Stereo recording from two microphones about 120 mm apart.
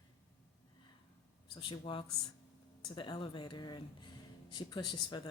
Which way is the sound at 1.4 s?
40° left (ahead or behind).